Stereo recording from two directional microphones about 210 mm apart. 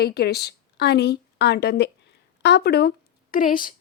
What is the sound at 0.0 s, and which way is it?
A woman's voice, 50° left (ahead or behind).